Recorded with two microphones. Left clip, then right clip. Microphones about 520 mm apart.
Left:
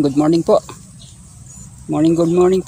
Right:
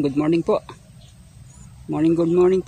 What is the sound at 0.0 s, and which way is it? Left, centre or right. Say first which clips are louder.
Mantra: left 5 dB; right.